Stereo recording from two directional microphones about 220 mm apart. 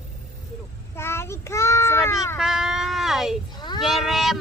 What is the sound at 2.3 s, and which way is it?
Speech, centre (ahead or behind).